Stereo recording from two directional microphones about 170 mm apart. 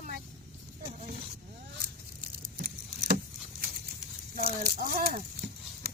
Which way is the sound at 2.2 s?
55° right (ahead or behind).